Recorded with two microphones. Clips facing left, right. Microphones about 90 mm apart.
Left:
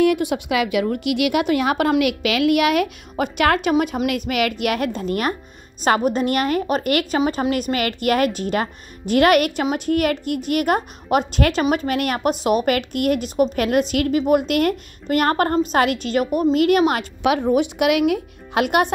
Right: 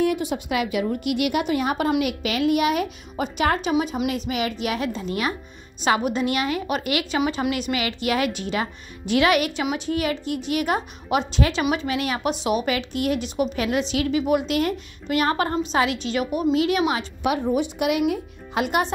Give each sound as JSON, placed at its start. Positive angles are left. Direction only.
{"t": 0.0, "sound": "a woman's voice", "side_deg": 65}
{"t": 3.7, "sound": "a woman's voice", "side_deg": 55}
{"t": 7.2, "sound": "a woman's voice", "side_deg": 40}
{"t": 17.2, "sound": "speech", "side_deg": 90}
{"t": 17.5, "sound": "a woman's voice", "side_deg": 75}